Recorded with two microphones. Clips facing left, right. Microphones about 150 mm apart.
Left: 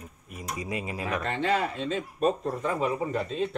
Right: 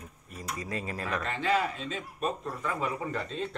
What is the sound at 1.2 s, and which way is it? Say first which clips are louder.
Speech: left 2 dB; 30° left (ahead or behind).